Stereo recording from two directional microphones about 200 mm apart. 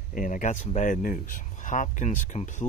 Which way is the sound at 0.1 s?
40° left (ahead or behind).